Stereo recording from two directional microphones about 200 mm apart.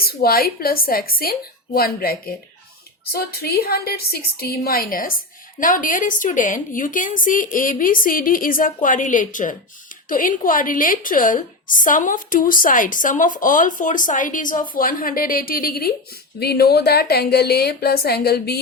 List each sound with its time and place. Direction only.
0.0 s a woman's voice: 50° left (ahead or behind)